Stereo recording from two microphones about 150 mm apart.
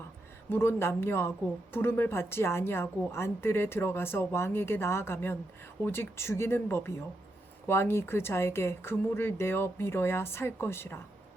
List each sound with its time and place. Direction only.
0.5 s a woman's voice: 15° left (ahead or behind)